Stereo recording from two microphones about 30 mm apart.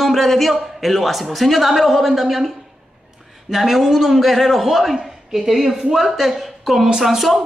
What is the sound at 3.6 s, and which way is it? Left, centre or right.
A woman's voice, centre.